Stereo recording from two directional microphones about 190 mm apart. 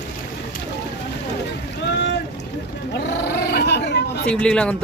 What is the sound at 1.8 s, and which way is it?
Boat, 65° left (ahead or behind).